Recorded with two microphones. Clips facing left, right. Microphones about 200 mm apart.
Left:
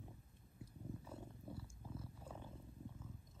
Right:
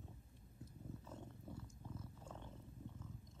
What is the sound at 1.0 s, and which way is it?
Wild animals, 10° left (ahead or behind).